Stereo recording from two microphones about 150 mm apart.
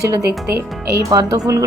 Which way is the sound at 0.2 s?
90° right.